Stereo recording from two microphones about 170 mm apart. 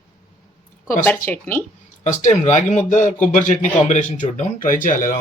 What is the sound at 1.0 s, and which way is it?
Speech, 10° left (ahead or behind).